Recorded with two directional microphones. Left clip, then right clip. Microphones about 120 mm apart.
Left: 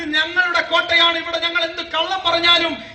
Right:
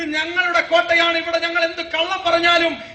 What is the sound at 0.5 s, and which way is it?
A man's voice, 15° left (ahead or behind).